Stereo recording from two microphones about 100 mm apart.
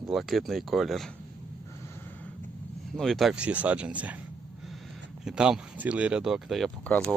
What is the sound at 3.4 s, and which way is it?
Speech, 15° right (ahead or behind).